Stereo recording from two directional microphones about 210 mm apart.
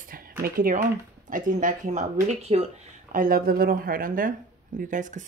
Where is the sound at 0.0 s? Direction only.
40° right (ahead or behind).